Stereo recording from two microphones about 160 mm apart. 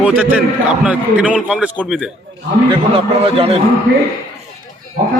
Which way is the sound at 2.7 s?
35° right (ahead or behind).